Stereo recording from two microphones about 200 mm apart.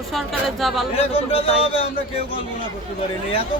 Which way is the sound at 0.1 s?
Centre (ahead or behind).